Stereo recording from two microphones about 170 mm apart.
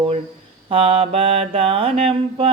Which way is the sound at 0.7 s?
35° right (ahead or behind).